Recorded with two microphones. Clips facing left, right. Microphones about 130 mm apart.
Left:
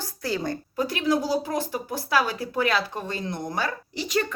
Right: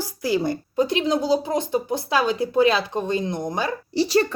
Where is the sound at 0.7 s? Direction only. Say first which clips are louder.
Right 3 dB; 25° right (ahead or behind).